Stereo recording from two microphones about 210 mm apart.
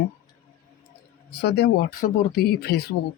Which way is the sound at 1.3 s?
50° left (ahead or behind).